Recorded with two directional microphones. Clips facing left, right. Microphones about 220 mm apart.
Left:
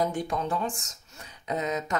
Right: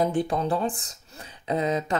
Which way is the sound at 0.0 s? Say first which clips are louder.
Right 4 dB; 30° right (ahead or behind).